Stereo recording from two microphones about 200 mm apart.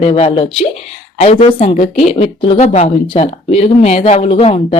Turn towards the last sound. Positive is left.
turn(degrees=30)  # may be behind; listen again after turning